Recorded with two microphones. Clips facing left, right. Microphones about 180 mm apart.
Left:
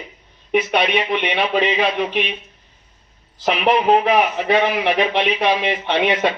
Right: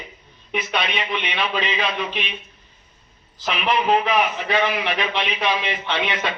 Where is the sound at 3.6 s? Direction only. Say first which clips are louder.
Left 4 dB; 50° left (ahead or behind).